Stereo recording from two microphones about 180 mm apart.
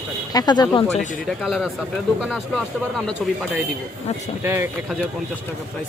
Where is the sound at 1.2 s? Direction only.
Centre (ahead or behind).